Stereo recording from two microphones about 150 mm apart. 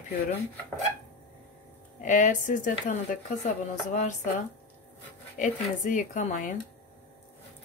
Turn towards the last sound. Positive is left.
turn(degrees=55)  # may be behind; listen again after turning